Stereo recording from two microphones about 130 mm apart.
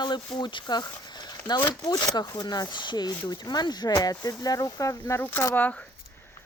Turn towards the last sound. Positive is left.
turn(degrees=15)  # may be behind; listen again after turning